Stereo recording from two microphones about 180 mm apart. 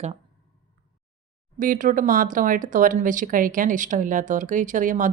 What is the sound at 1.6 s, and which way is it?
Speech, 45° right (ahead or behind).